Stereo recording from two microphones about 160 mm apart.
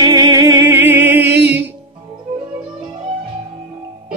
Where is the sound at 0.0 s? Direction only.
25° right (ahead or behind).